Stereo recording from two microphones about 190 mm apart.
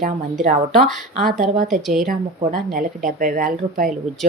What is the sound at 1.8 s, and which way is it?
Speech, centre (ahead or behind).